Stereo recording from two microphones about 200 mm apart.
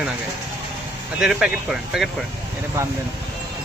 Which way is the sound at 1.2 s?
Centre (ahead or behind).